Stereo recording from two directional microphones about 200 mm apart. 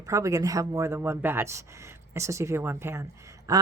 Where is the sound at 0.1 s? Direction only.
15° right (ahead or behind).